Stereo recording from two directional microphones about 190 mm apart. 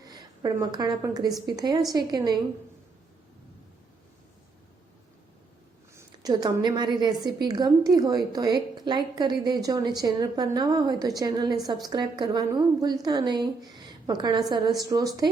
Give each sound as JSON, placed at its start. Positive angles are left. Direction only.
{"t": 0.0, "sound": "a woman's voice", "side_deg": -20}
{"t": 6.0, "sound": "a woman's voice", "side_deg": -20}